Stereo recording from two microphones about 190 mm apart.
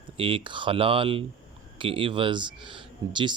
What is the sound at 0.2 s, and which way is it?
Speech, 25° right (ahead or behind).